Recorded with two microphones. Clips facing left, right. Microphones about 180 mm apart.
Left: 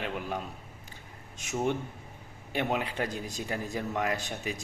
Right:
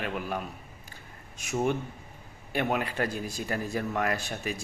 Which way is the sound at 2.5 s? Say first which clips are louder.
Right 2 dB; 15° left (ahead or behind).